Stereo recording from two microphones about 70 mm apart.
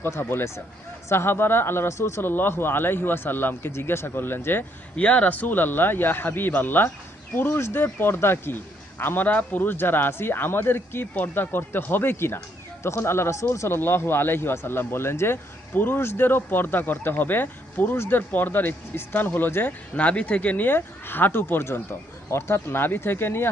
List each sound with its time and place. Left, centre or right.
0.0 s speech: left
4.9 s speech: centre
20.0 s speech: centre